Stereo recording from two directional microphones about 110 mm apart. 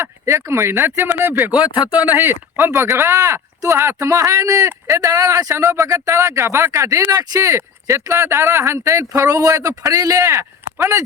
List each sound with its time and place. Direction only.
0.0 s speech: 25° right (ahead or behind)
1.6 s speech: 45° left (ahead or behind)
2.0 s speech: 20° right (ahead or behind)